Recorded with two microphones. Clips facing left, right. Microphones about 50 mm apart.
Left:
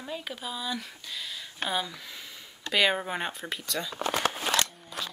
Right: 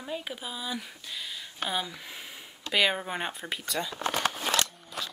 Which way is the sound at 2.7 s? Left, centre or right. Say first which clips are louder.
Left 1 dB; centre.